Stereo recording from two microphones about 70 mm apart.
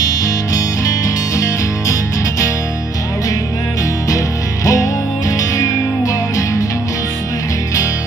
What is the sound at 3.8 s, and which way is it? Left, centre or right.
Music, left.